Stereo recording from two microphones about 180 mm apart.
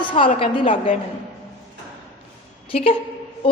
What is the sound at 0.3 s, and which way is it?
Speech, 30° left (ahead or behind).